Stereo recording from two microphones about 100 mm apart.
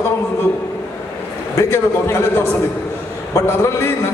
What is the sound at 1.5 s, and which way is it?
A man's voice, 25° left (ahead or behind).